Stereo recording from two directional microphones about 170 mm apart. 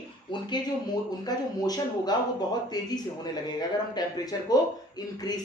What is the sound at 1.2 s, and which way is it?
Speech, 20° left (ahead or behind).